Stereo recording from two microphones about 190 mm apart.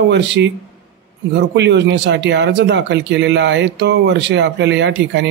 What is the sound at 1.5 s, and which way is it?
Speech, 65° right (ahead or behind).